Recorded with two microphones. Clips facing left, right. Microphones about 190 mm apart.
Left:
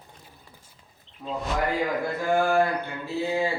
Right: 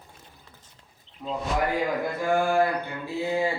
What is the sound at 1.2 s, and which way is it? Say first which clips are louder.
Speech: right 1 dB; centre (ahead or behind).